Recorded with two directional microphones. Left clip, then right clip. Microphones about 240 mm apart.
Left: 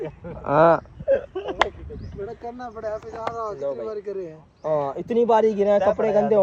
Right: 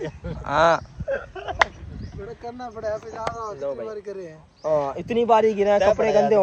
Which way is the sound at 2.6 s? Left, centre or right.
Right.